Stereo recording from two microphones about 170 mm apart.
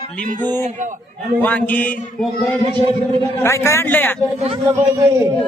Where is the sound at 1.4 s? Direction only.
10° left (ahead or behind).